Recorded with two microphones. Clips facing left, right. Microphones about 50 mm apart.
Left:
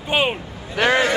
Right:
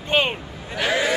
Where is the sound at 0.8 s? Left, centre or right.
Left.